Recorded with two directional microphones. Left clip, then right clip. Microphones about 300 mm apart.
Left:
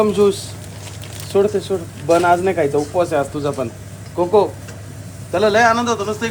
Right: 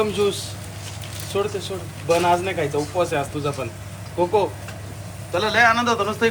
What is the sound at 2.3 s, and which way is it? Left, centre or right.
Speech, left.